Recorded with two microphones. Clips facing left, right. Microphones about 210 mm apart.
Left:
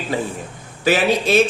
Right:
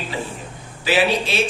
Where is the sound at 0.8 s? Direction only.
45° left (ahead or behind).